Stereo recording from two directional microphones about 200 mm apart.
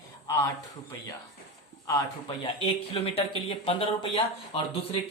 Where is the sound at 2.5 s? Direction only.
30° left (ahead or behind).